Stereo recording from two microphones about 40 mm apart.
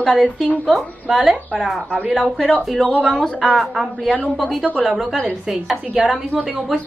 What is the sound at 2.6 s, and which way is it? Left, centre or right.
A woman's voice, centre.